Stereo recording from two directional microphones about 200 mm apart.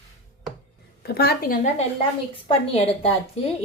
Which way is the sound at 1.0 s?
50° left (ahead or behind).